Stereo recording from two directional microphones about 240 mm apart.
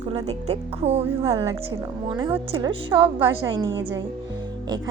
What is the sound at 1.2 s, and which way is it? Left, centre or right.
A woman's voice, centre.